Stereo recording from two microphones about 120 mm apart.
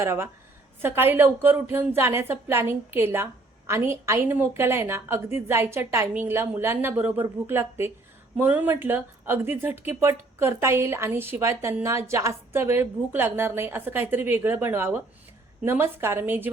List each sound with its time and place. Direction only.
0.0 s a woman's voice: 20° right (ahead or behind)